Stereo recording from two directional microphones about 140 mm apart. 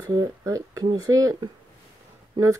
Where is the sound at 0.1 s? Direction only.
25° right (ahead or behind).